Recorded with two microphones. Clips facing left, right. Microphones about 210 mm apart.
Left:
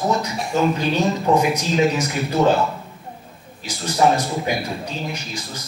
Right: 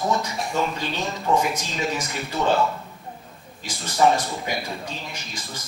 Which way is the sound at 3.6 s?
Centre (ahead or behind).